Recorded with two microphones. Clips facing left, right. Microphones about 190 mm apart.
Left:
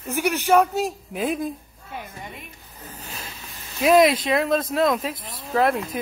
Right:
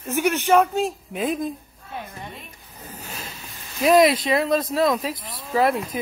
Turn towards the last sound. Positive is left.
turn(degrees=0)  # may be behind; listen again after turning